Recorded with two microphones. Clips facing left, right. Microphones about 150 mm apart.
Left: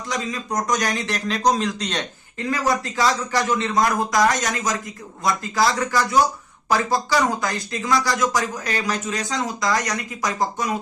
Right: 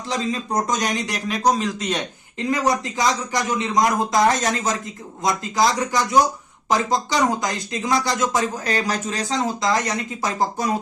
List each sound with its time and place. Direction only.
0.1 s speech: 30° right (ahead or behind); by 2.0 s 5° right (ahead or behind)
2.4 s speech: 20° right (ahead or behind)